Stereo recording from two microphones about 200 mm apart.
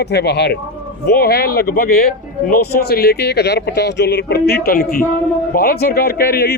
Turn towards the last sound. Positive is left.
turn(degrees=50)  # may be behind; listen again after turning